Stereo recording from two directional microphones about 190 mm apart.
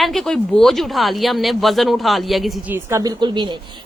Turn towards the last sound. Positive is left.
turn(degrees=-25)  # may be behind; listen again after turning